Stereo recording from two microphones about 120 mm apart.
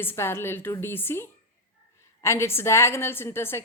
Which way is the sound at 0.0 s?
20° left (ahead or behind).